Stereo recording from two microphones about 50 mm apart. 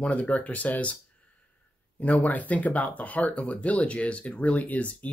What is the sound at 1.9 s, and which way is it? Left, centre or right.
Speech, left.